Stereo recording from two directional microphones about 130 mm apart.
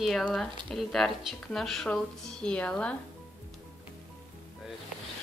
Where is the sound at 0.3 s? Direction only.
Centre (ahead or behind).